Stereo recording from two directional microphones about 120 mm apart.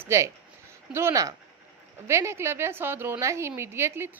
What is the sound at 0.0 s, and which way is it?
A woman's voice, 25° right (ahead or behind).